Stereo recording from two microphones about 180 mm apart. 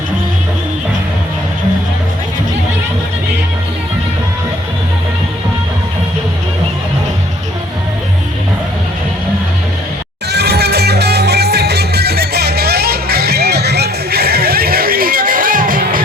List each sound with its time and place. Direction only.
10.3 s music: 65° right (ahead or behind)